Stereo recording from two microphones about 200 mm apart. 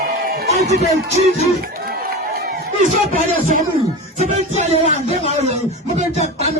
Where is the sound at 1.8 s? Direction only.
50° right (ahead or behind).